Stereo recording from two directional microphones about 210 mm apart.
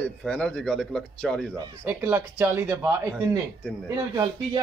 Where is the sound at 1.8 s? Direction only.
10° right (ahead or behind).